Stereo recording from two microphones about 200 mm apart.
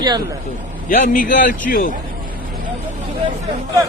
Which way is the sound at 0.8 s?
40° left (ahead or behind).